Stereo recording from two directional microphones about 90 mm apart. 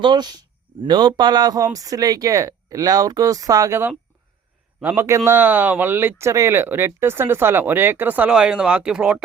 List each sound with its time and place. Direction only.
0.0 s speech: 55° right (ahead or behind)
4.9 s speech: 35° right (ahead or behind); by 9.1 s 10° right (ahead or behind)